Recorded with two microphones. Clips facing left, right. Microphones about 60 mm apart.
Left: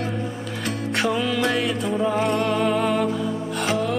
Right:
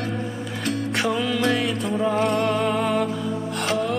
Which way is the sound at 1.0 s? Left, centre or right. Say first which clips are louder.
Left 2 dB; centre.